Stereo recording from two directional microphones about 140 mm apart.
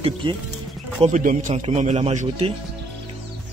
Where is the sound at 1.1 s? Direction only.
65° right (ahead or behind).